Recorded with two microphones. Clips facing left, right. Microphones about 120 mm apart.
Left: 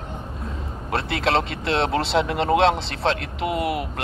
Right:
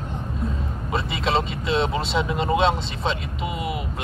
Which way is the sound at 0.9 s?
70° left (ahead or behind).